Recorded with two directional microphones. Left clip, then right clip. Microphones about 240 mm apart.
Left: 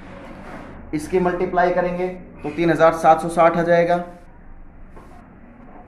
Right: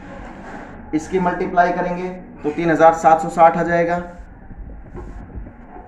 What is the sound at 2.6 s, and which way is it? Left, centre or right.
Speech, left.